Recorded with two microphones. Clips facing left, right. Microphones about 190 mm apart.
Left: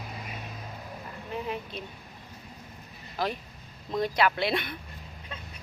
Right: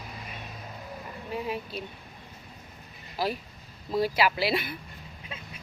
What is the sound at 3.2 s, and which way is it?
Speech, 5° right (ahead or behind).